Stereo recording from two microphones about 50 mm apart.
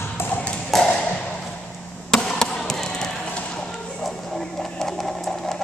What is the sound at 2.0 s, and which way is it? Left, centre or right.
Basketball bounce, centre.